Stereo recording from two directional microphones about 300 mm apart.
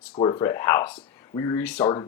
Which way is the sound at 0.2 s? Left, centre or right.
Centre.